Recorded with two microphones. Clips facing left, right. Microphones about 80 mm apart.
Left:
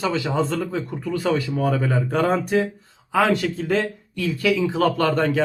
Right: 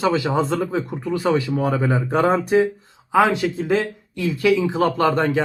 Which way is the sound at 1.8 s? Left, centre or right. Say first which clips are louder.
Right 2 dB; centre.